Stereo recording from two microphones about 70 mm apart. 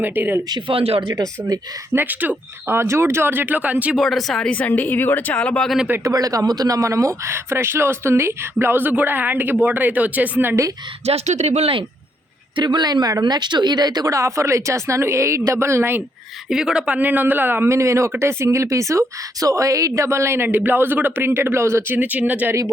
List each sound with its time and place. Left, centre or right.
0.0 s speech: right
1.9 s speech: right
2.7 s a man's voice: right
3.9 s speech: centre
4.4 s a woman's voice: left
5.4 s speech: centre
6.0 s a man's voice: right
12.5 s speech: right
13.2 s speech: right
14.1 s a woman's voice: right
16.5 s speech: centre
17.0 s a man's voice: right
21.9 s speech: right